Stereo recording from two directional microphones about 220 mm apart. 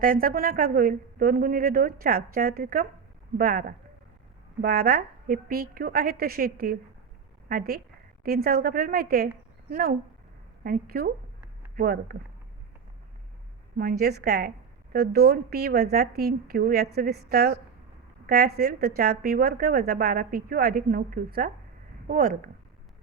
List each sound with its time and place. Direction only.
0.0 s a woman's voice: 40° right (ahead or behind)
14.0 s a woman's voice: 45° right (ahead or behind)